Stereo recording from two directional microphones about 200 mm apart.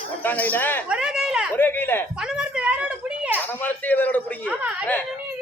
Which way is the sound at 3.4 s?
10° left (ahead or behind).